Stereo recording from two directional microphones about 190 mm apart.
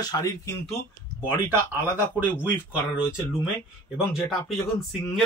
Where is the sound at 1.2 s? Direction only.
10° right (ahead or behind).